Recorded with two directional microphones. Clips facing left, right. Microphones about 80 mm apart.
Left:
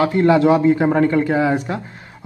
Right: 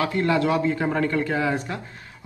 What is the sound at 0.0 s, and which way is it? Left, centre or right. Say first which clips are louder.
A man's voice: left 8 dB; left.